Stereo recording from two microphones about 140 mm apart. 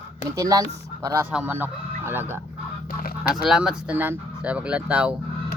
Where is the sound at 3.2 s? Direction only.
5° right (ahead or behind).